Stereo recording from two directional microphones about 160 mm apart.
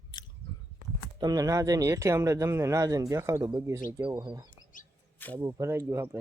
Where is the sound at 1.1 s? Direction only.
25° right (ahead or behind).